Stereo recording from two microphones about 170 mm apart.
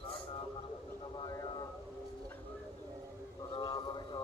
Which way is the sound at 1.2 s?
20° left (ahead or behind).